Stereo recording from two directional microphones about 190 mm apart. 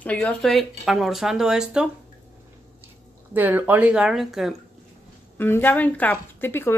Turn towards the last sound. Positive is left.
turn(degrees=10)  # may be behind; listen again after turning